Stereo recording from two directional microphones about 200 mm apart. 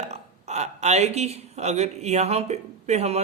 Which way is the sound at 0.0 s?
35° right (ahead or behind).